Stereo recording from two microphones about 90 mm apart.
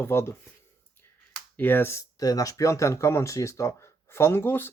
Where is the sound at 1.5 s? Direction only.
25° left (ahead or behind).